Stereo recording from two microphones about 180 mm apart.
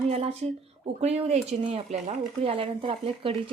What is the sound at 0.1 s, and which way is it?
Speech, 35° right (ahead or behind).